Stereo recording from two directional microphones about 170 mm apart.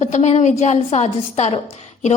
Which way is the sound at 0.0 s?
40° left (ahead or behind).